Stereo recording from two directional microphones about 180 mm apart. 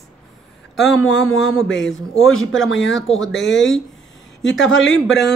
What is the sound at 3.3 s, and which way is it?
Speech, 80° left.